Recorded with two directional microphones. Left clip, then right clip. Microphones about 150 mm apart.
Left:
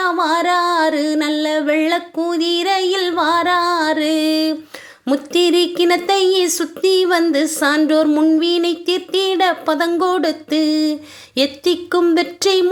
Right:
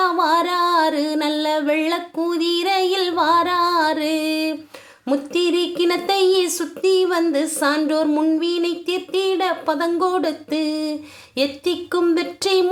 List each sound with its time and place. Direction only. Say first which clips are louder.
0.0 s music: left 1 dB; 10° left (ahead or behind)
5.0 s a woman's voice: left 4 dB; 25° left (ahead or behind)